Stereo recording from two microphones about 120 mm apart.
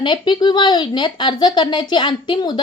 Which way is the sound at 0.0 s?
40° left (ahead or behind).